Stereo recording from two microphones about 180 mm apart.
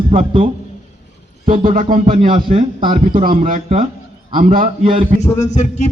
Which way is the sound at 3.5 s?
40° right (ahead or behind).